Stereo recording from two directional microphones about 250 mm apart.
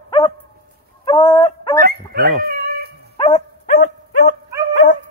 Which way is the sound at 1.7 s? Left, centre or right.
Right.